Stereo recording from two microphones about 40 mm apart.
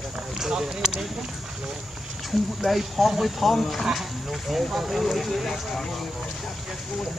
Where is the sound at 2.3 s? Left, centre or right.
Centre.